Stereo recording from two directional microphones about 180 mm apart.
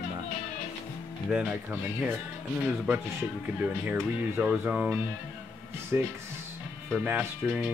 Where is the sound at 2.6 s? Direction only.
5° right (ahead or behind).